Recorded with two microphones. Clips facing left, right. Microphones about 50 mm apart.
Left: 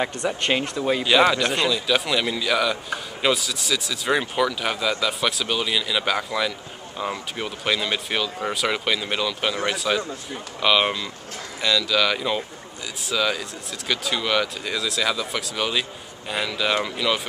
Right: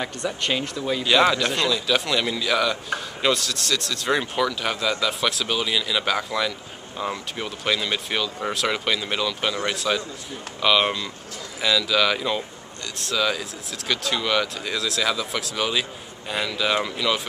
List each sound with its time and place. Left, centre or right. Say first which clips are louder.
0.0 s speech: left 3 dB; centre
1.0 s speech: even; centre